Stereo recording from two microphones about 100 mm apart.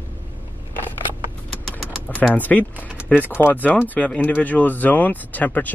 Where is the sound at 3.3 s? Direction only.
20° left (ahead or behind).